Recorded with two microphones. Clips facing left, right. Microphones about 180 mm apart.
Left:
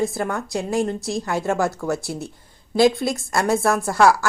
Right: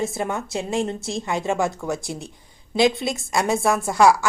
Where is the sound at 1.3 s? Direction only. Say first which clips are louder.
Left 1 dB; 20° right (ahead or behind).